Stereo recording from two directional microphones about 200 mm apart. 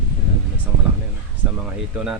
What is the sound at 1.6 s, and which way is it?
Speech, 5° right (ahead or behind).